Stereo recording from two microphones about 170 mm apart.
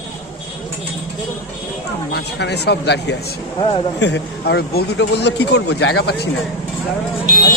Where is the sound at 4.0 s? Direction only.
90° left.